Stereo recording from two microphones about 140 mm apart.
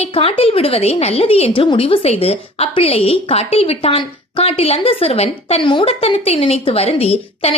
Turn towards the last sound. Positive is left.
turn(degrees=45)  # may be behind; listen again after turning